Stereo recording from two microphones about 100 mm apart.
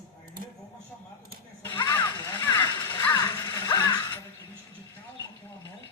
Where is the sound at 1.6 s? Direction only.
20° left (ahead or behind).